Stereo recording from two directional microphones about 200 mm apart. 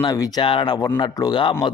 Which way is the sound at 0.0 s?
20° left (ahead or behind).